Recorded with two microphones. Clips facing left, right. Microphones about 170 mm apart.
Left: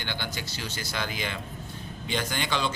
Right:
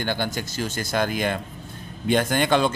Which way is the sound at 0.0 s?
45° right (ahead or behind).